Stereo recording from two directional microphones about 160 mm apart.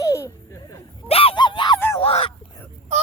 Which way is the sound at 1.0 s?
35° left (ahead or behind).